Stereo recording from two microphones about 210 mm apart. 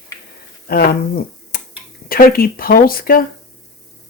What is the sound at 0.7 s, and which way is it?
Speech, 45° left (ahead or behind).